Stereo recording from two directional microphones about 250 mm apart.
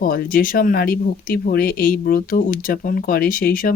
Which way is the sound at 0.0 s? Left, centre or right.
Left.